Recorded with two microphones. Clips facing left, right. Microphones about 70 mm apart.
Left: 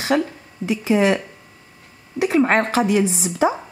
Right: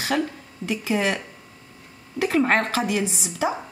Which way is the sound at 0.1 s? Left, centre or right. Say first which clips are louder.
Left 4 dB; left.